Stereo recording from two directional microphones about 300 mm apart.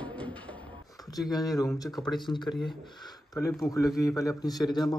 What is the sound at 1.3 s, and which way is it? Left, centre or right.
Speech, centre.